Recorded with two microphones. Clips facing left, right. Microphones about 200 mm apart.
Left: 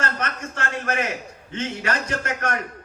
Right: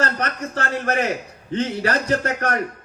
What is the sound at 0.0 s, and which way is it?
A man's voice, 35° right (ahead or behind).